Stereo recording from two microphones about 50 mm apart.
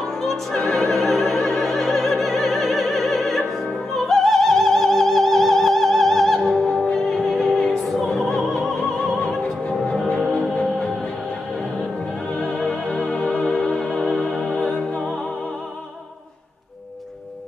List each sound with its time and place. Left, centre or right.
0.1 s opera: centre
6.9 s music: centre
8.4 s opera: centre
9.0 s music: centre
9.4 s music: left
12.4 s music: centre
15.0 s music: centre